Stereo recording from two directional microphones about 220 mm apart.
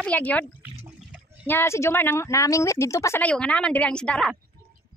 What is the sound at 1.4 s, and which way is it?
Speech, 10° left (ahead or behind).